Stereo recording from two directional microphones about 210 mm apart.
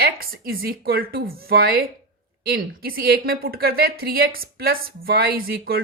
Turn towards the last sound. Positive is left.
turn(degrees=-45)  # may be behind; listen again after turning